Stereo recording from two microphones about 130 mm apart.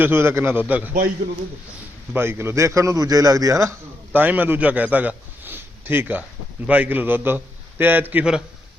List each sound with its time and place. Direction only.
0.0 s a man's voice: 20° right (ahead or behind)
2.1 s a man's voice: 15° right (ahead or behind)